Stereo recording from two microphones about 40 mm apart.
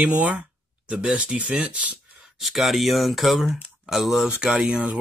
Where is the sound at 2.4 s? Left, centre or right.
Centre.